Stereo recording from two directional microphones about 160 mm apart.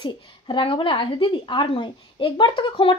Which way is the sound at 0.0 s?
30° left (ahead or behind).